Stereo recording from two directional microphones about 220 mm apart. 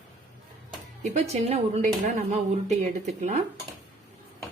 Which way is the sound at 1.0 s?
30° right (ahead or behind).